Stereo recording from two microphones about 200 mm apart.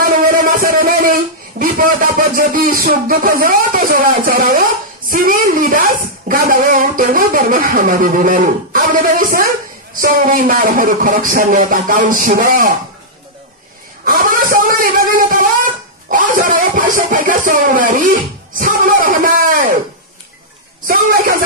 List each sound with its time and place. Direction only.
0.0 s speech: 45° right (ahead or behind)
14.0 s a sound: 45° right (ahead or behind)
16.1 s speech: 45° right (ahead or behind)
20.8 s a woman's voice: 45° right (ahead or behind)